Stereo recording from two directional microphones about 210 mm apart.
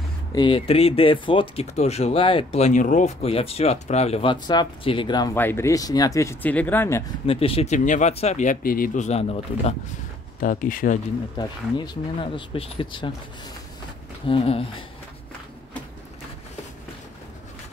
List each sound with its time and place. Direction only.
0.3 s speech: 20° left (ahead or behind)
7.2 s speech: 25° left (ahead or behind)
11.3 s speech: 20° left (ahead or behind)
14.2 s speech: 25° left (ahead or behind)